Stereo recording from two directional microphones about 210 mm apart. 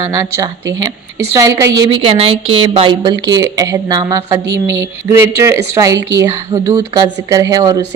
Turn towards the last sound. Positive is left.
turn(degrees=-15)  # may be behind; listen again after turning